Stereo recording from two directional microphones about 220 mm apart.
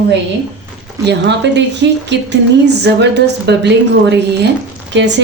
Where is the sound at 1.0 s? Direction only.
50° right (ahead or behind).